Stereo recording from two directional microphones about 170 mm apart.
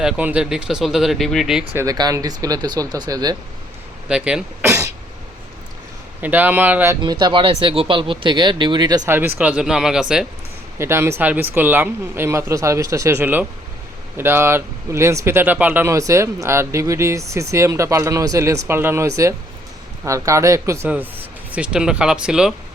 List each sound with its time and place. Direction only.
0.0 s speech: 5° right (ahead or behind)
1.7 s speech: 20° right (ahead or behind)
4.1 s speech: 5° right (ahead or behind)
4.6 s throat clearing: 15° right (ahead or behind)
6.2 s speech: 10° right (ahead or behind)
7.0 s speech: 25° right (ahead or behind)
9.0 s speech: 10° right (ahead or behind)
10.8 s speech: 15° right (ahead or behind)